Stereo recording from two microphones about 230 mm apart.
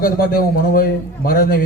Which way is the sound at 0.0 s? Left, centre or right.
Left.